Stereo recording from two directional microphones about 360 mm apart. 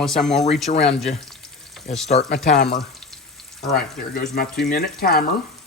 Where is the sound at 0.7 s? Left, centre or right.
Centre.